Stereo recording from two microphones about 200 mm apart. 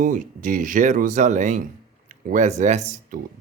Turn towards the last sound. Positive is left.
turn(degrees=-35)  # may be behind; listen again after turning